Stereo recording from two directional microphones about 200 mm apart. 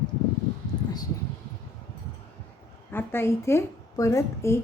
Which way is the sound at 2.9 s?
10° left (ahead or behind).